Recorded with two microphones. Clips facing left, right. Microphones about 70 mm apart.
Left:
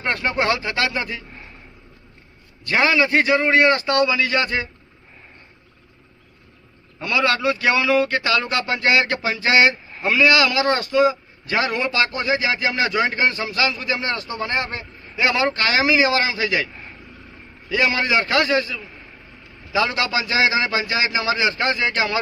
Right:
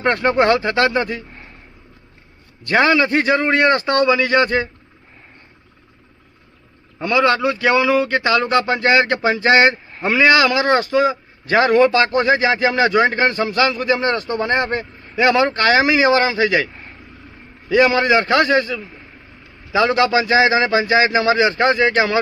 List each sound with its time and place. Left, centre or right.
0.0 s speech: right
2.6 s speech: right
7.0 s speech: right
17.7 s speech: right